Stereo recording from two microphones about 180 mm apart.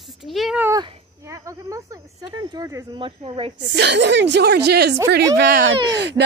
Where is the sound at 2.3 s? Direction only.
20° right (ahead or behind).